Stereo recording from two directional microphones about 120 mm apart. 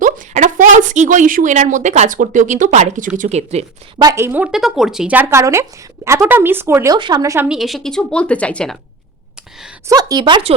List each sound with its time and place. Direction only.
0.0 s speech: 90° right
3.2 s speech: 70° right (ahead or behind)
4.1 s speech: 20° right (ahead or behind)
4.5 s a woman's voice: 5° right (ahead or behind)
5.1 s speech: 20° right (ahead or behind)
7.4 s a woman's voice: 5° right (ahead or behind)
9.9 s speech: 30° right (ahead or behind)